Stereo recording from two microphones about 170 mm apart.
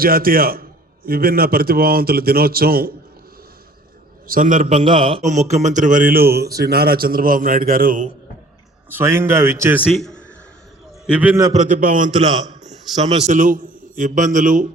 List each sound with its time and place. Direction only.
0.0 s a man's voice: 60° right (ahead or behind)
4.3 s a man's voice: 50° right (ahead or behind)
4.6 s a man's voice: 30° right (ahead or behind)
5.2 s a man's voice: 45° right (ahead or behind)
8.9 s a man's voice: 15° right (ahead or behind); by 10.2 s 5° left (ahead or behind)
11.0 s a man's voice: 10° right (ahead or behind)
11.5 s a man's voice: 50° right (ahead or behind)